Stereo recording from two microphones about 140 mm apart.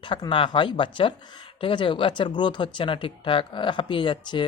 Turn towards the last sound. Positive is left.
turn(degrees=35)  # may be behind; listen again after turning